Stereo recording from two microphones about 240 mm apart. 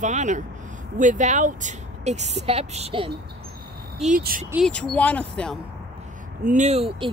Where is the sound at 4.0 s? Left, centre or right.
Right.